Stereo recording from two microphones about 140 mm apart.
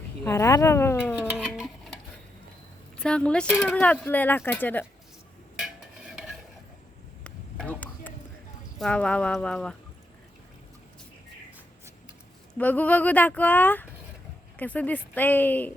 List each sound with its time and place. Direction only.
0.3 s speech: 20° left (ahead or behind)
1.3 s music: 5° right (ahead or behind)
3.0 s speech: 5° left (ahead or behind)
5.5 s stir: 5° right (ahead or behind)
7.3 s a sound: 10° left (ahead or behind)
8.8 s speech: 5° left (ahead or behind)
12.5 s speech: 10° left (ahead or behind)